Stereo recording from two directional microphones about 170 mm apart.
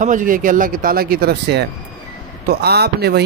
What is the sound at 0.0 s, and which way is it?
Speech, 50° right (ahead or behind).